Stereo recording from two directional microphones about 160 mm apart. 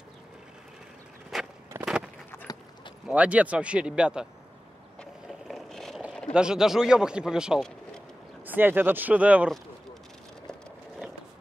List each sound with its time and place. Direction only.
1.3 s vehicle: centre (ahead or behind)
1.7 s a sound: 15° right (ahead or behind)
2.3 s clip-clop: 15° left (ahead or behind)
3.1 s speech: 10° right (ahead or behind)
5.5 s vehicle: centre (ahead or behind)
6.3 s speech: 5° right (ahead or behind)
8.5 s speech: 10° right (ahead or behind)